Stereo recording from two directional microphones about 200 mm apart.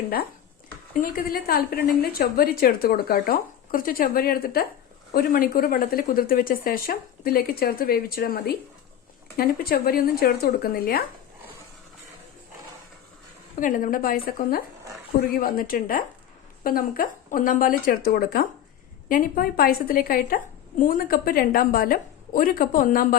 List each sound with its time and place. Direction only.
1.0 s a woman's voice: 45° left (ahead or behind)
13.6 s a woman's voice: 40° left (ahead or behind)